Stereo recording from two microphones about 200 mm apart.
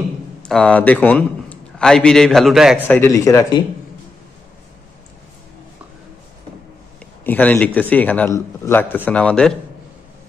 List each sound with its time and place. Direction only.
0.4 s a man's voice: 5° left (ahead or behind)
3.0 s speech: 15° left (ahead or behind)
7.2 s speech: 10° left (ahead or behind)